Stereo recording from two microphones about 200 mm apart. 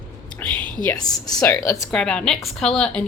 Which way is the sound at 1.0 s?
15° left (ahead or behind).